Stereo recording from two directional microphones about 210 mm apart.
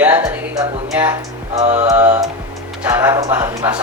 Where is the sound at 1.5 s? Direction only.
35° right (ahead or behind).